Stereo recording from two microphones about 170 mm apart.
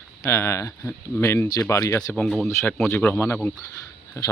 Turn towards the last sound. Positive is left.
turn(degrees=20)  # may be behind; listen again after turning